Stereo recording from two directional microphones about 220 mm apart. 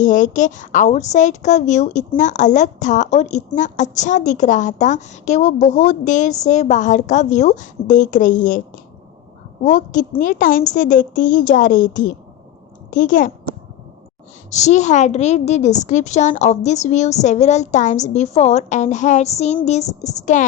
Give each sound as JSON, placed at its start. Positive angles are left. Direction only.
{"t": 0.0, "sound": "a woman's voice", "side_deg": 35}
{"t": 9.6, "sound": "a woman's voice", "side_deg": 35}
{"t": 14.5, "sound": "a woman's voice", "side_deg": 30}